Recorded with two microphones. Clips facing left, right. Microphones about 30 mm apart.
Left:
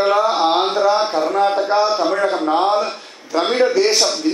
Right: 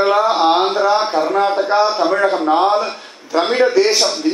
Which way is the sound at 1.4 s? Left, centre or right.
Centre.